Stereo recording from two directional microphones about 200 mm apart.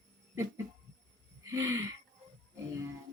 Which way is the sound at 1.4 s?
15° right (ahead or behind).